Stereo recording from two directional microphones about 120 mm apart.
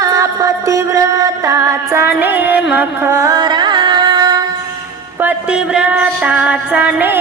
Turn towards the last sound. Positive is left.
turn(degrees=-15)  # may be behind; listen again after turning